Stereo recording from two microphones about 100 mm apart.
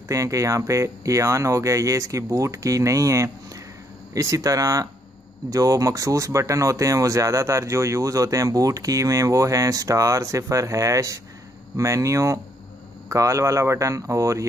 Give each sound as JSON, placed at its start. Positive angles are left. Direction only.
{"t": 0.1, "sound": "speech", "side_deg": -30}